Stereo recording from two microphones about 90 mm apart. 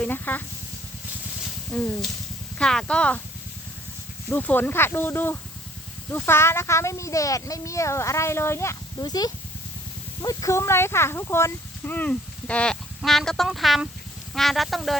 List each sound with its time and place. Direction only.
0.0 s speech: 20° left (ahead or behind)
1.7 s speech: 10° left (ahead or behind)
4.3 s a child's voice: 20° left (ahead or behind)
9.0 s speech: 50° left (ahead or behind)
10.2 s speech: 35° left (ahead or behind)
11.9 s speech: 15° left (ahead or behind)